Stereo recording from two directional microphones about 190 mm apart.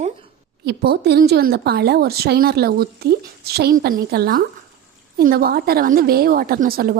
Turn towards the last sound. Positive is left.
turn(degrees=-50)  # may be behind; listen again after turning